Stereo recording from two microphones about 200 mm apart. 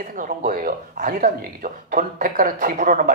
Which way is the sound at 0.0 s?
45° right (ahead or behind).